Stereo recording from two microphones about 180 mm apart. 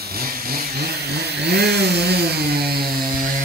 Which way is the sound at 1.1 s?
65° right (ahead or behind).